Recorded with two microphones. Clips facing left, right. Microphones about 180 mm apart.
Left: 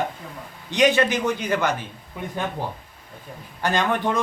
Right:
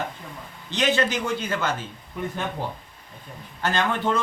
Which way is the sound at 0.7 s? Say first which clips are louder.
Left 4 dB; 15° left (ahead or behind).